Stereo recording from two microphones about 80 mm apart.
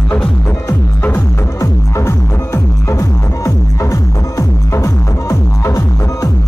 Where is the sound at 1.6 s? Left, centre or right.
Left.